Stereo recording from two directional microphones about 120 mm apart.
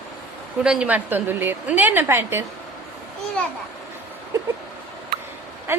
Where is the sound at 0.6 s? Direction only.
10° right (ahead or behind).